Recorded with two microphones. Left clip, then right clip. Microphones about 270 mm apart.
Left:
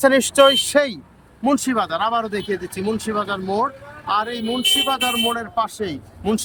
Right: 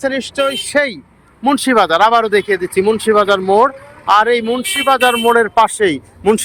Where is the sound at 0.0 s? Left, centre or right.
Centre.